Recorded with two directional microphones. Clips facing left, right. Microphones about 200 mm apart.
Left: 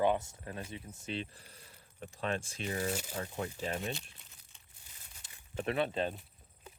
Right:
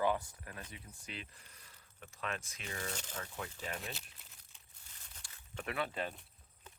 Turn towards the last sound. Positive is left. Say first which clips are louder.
# left 6 dB
turn(degrees=25)  # may be behind; listen again after turning